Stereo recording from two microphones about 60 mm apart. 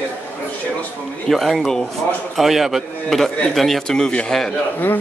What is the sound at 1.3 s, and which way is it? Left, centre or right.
A man's voice, centre.